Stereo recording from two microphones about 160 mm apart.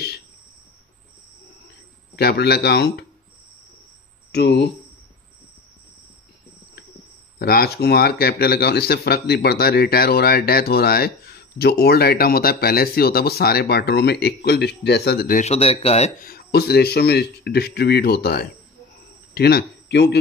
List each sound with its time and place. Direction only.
2.1 s speech: 90° left
4.3 s speech: 90° left
7.3 s speech: 80° left
15.4 s speech: 40° left (ahead or behind)
16.2 s speech: 70° left (ahead or behind)
19.3 s speech: 90° left